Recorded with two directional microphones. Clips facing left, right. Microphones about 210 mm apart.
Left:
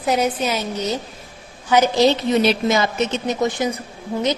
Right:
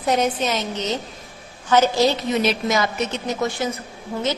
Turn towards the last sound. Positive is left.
turn(degrees=15)  # may be behind; listen again after turning